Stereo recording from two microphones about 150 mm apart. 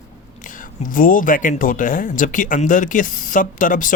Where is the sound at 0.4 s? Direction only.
60° left (ahead or behind).